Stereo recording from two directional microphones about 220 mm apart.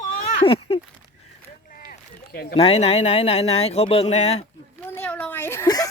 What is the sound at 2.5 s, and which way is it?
Speech, 25° left (ahead or behind).